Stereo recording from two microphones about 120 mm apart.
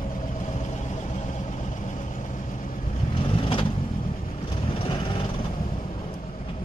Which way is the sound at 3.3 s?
50° left (ahead or behind).